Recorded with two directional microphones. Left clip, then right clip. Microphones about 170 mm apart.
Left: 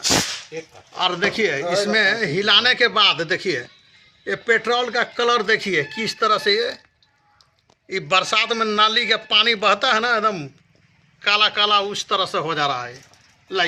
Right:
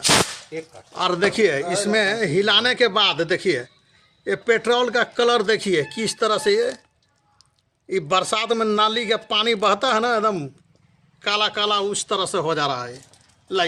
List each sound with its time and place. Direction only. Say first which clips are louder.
0.9 s a man's voice: even; 65° right (ahead or behind)
7.9 s a man's voice: left 1 dB; 90° right